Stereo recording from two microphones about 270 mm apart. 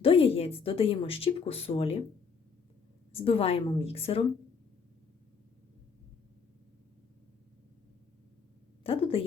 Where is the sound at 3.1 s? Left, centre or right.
Centre.